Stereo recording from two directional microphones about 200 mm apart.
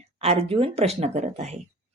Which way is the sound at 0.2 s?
30° right (ahead or behind).